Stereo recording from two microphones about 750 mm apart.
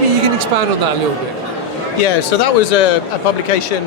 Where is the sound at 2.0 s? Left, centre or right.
Left.